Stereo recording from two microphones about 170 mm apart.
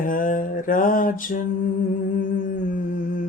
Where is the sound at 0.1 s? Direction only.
50° left (ahead or behind).